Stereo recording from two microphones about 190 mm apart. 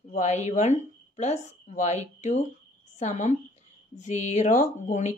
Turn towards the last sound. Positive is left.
turn(degrees=40)  # may be behind; listen again after turning